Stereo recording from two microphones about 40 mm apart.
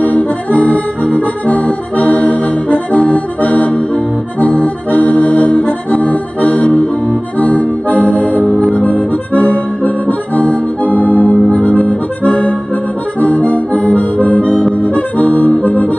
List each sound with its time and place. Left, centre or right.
0.0 s accordion: left